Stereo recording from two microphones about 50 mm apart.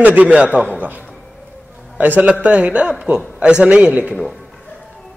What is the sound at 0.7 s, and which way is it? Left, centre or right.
A man's voice, right.